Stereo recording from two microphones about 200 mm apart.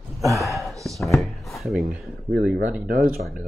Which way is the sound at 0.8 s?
Centre (ahead or behind).